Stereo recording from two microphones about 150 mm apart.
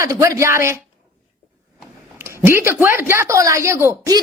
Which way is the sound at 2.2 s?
15° right (ahead or behind).